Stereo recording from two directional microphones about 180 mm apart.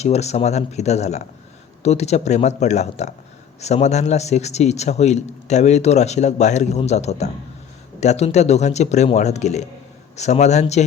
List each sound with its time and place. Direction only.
0.0 s a man's voice: 35° left (ahead or behind)